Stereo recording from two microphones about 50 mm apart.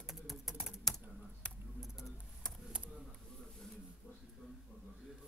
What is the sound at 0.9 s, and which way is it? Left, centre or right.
Typing, centre.